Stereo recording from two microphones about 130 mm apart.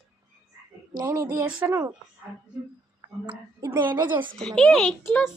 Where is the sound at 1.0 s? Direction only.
25° right (ahead or behind).